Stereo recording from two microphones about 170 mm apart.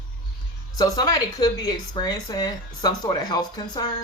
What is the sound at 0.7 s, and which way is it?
A woman's voice, 20° left (ahead or behind).